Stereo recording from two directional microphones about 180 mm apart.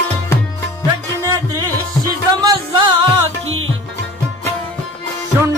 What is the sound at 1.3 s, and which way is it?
Music, 20° right (ahead or behind).